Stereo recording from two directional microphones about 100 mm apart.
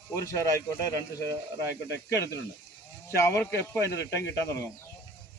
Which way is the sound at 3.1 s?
25° left (ahead or behind).